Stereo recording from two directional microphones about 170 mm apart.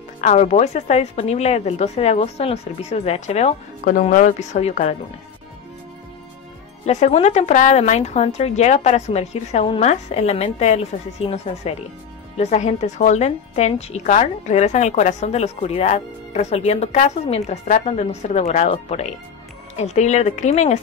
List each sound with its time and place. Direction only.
0.2 s speech: 45° left (ahead or behind)
6.9 s speech: 40° left (ahead or behind)